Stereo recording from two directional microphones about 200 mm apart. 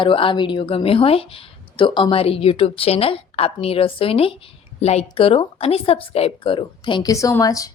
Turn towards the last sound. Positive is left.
turn(degrees=15)  # may be behind; listen again after turning